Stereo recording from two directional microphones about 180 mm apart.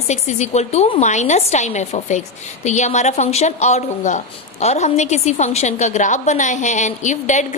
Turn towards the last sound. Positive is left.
turn(degrees=40)  # may be behind; listen again after turning